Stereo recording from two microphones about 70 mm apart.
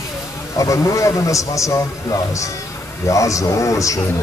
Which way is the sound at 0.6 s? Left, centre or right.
Left.